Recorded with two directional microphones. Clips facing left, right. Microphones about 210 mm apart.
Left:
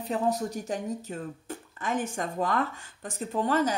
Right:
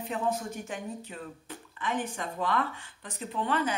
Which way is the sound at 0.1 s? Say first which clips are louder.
Left 4 dB; 40° left (ahead or behind).